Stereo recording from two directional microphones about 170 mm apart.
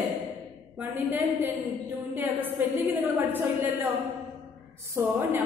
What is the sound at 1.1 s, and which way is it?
A woman's voice, 10° right (ahead or behind).